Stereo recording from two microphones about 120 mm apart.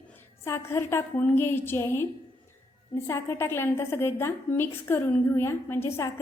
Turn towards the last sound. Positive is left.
turn(degrees=20)  # may be behind; listen again after turning